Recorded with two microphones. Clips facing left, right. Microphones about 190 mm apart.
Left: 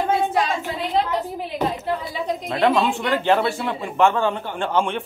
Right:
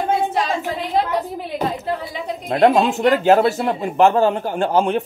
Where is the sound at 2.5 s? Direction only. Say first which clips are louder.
Right 5 dB; 45° right (ahead or behind).